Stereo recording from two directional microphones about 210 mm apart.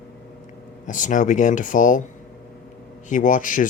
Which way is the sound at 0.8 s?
35° left (ahead or behind).